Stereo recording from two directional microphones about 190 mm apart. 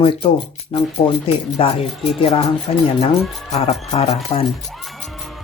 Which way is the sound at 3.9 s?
35° left (ahead or behind).